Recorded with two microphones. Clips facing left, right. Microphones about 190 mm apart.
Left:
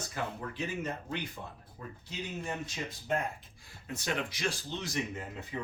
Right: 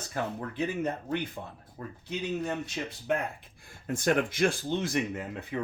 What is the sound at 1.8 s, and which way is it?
A man's voice, 70° right (ahead or behind).